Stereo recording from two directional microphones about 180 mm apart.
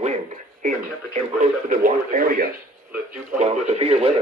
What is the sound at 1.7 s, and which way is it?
Speech, 50° right (ahead or behind).